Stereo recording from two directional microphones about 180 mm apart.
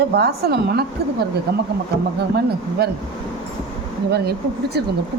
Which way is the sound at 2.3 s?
65° right (ahead or behind).